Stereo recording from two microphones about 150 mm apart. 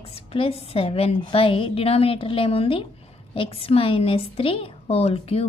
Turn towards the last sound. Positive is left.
turn(degrees=40)  # may be behind; listen again after turning